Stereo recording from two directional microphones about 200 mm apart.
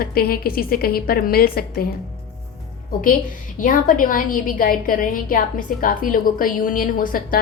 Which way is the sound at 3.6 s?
45° left (ahead or behind).